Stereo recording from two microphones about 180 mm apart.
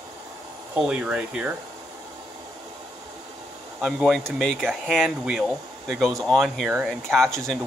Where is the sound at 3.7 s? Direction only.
5° right (ahead or behind).